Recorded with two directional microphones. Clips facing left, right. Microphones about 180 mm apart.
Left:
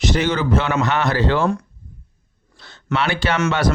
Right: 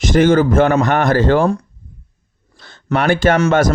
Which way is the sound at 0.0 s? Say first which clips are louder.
Right 8 dB; 50° right (ahead or behind).